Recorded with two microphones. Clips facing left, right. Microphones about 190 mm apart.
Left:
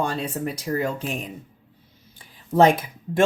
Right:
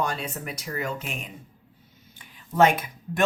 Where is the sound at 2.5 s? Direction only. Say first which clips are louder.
Left 4 dB; 30° left (ahead or behind).